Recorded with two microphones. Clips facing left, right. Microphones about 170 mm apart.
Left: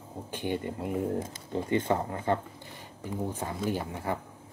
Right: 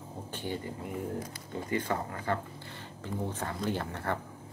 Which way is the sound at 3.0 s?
10° left (ahead or behind).